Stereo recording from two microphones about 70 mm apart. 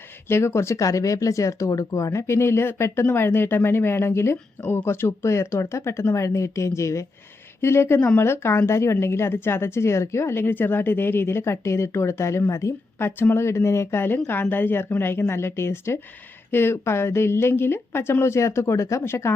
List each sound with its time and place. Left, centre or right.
0.3 s a woman's voice: left
13.1 s speech: left